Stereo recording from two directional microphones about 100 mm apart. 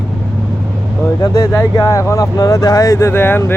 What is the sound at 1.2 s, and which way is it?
Speech, 35° left (ahead or behind).